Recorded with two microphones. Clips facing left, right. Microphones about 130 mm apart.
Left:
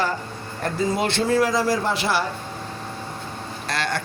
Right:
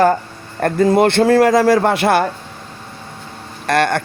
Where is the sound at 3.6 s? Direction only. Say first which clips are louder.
Right 11 dB; 55° right (ahead or behind).